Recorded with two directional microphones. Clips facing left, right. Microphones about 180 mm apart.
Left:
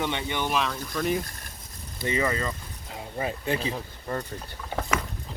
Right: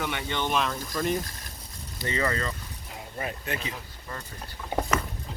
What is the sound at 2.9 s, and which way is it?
Speech, 25° left (ahead or behind).